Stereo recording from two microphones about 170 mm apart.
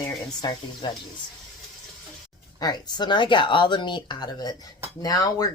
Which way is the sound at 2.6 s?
25° left (ahead or behind).